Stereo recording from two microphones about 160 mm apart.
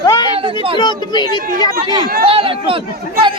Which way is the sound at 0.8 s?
30° left (ahead or behind).